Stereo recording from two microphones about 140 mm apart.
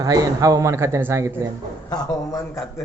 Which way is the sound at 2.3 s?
25° left (ahead or behind).